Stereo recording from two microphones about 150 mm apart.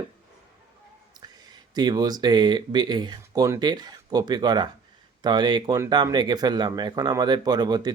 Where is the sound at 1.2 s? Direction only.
25° right (ahead or behind).